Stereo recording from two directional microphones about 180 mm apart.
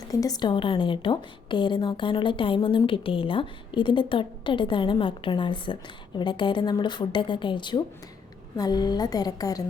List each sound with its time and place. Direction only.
0.1 s a woman's voice: 20° left (ahead or behind)